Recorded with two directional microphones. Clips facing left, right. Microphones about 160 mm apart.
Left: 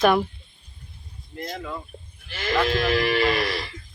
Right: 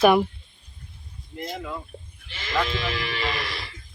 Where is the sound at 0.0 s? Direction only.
5° right (ahead or behind).